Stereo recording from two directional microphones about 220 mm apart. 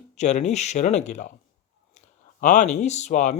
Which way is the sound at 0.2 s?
30° left (ahead or behind).